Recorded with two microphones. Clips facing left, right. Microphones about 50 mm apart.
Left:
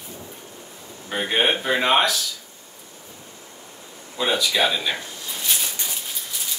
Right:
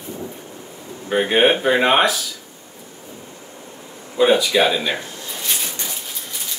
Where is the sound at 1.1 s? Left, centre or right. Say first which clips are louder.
Right 6 dB; centre.